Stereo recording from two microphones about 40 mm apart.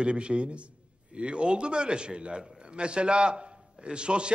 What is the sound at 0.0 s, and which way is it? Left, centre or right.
A man's voice, right.